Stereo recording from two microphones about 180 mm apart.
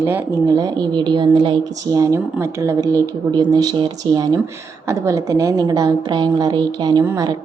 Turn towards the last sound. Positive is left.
turn(degrees=-20)  # may be behind; listen again after turning